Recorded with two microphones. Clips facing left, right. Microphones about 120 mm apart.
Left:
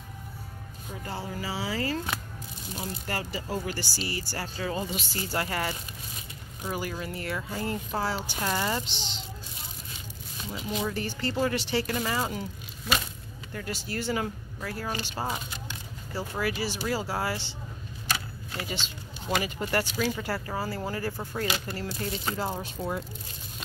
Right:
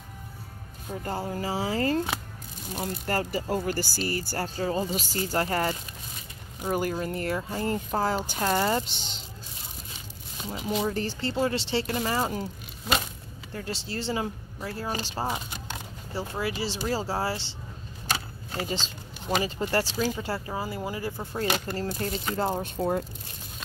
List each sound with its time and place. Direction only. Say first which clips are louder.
1.0 s speech: right 4 dB; 45° right (ahead or behind)
8.8 s a child's voice: left 2 dB; centre (ahead or behind)
10.8 s speech: right 1 dB; 35° right (ahead or behind)
13.5 s speech: right 1 dB; 30° right (ahead or behind)
18.1 s keys jangling: right 2 dB; 30° right (ahead or behind)
19.3 s speech: right 2 dB; 25° right (ahead or behind)
21.5 s speech: right 4 dB; 45° right (ahead or behind)